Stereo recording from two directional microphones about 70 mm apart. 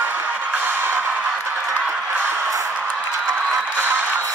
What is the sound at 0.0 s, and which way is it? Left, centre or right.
Music, right.